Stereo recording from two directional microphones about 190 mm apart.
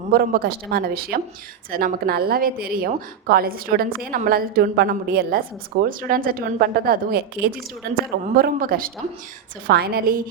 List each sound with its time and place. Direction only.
0.1 s a woman's voice: 55° right (ahead or behind)